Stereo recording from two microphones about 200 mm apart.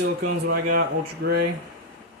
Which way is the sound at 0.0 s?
50° right (ahead or behind).